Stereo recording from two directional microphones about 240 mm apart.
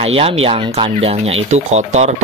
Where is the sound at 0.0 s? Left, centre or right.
Right.